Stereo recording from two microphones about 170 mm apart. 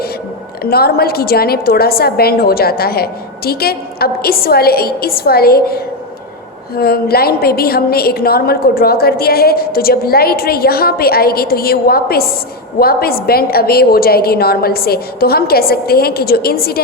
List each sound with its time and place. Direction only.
0.6 s a woman's voice: 65° left (ahead or behind)